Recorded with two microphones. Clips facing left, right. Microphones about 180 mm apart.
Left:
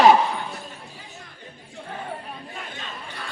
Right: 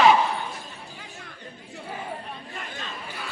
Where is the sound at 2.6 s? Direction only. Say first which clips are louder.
Even; centre (ahead or behind).